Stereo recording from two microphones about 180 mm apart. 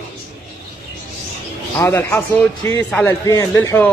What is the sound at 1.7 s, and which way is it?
A man's voice, 15° left (ahead or behind).